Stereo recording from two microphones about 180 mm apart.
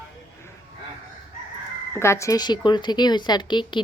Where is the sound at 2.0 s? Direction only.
15° left (ahead or behind).